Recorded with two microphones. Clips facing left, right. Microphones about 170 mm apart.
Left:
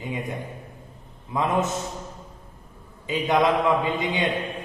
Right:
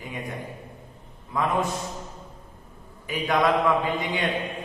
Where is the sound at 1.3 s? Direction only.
20° left (ahead or behind).